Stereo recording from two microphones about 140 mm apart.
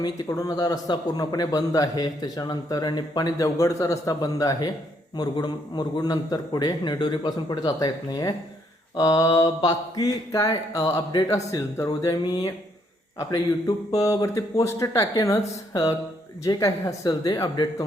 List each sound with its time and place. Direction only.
0.0 s a man's voice: 25° left (ahead or behind)